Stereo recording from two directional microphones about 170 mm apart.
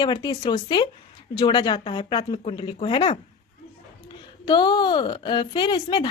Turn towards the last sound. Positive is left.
turn(degrees=25)  # may be behind; listen again after turning